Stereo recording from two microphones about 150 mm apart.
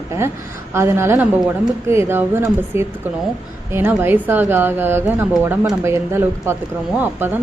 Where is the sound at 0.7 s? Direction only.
15° right (ahead or behind).